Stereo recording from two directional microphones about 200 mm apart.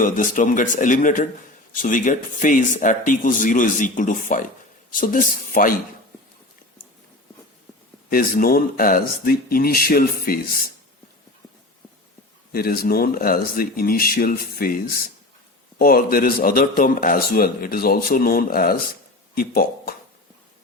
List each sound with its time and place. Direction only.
0.0 s speech: 40° left (ahead or behind)
8.1 s a man's voice: 45° left (ahead or behind)
12.5 s a man's voice: 50° left (ahead or behind)